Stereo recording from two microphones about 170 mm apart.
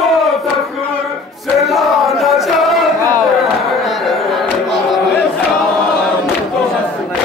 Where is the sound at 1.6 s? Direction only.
Centre (ahead or behind).